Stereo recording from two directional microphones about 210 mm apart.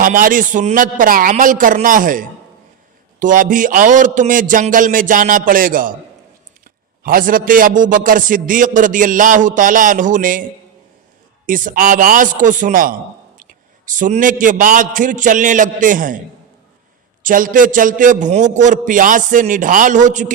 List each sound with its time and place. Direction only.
0.0 s a man's voice: 40° right (ahead or behind)
7.0 s a man's voice: 40° right (ahead or behind)
11.4 s a man's voice: 40° right (ahead or behind)
17.2 s a man's voice: 40° right (ahead or behind)